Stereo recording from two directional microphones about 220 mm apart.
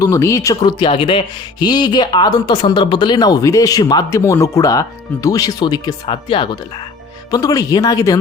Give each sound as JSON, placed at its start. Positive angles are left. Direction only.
{"t": 0.0, "sound": "speech", "side_deg": 15}